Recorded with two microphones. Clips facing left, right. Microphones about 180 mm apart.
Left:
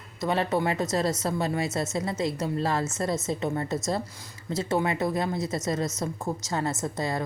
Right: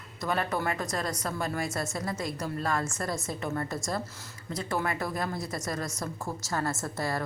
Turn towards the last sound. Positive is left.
turn(degrees=20)  # may be behind; listen again after turning